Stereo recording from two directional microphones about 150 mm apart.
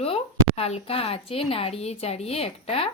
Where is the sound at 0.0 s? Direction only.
40° left (ahead or behind).